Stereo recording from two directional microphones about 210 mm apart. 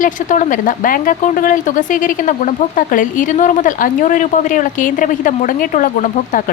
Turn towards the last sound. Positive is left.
turn(degrees=40)  # may be behind; listen again after turning